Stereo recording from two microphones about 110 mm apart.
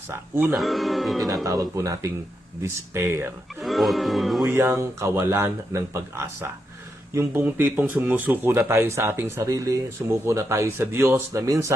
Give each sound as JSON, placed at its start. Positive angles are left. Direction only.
{"t": 0.1, "sound": "speech", "side_deg": -15}
{"t": 0.5, "sound": "speech", "side_deg": 0}
{"t": 1.5, "sound": "speech", "side_deg": -30}
{"t": 3.6, "sound": "speech", "side_deg": 0}
{"t": 4.5, "sound": "speech", "side_deg": -25}